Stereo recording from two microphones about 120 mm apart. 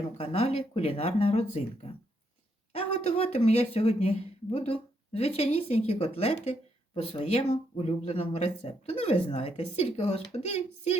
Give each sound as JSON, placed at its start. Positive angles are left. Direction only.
{"t": 0.2, "sound": "speech", "side_deg": 55}